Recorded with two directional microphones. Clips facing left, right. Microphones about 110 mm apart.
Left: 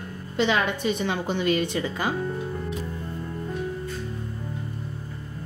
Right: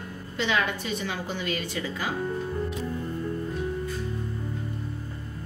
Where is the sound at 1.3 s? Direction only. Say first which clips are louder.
Left 7 dB; 25° left (ahead or behind).